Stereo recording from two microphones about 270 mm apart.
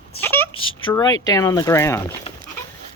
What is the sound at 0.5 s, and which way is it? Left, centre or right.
Speech, centre.